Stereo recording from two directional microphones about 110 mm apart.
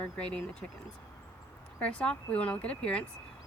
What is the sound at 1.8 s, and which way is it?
Speech, 10° left (ahead or behind).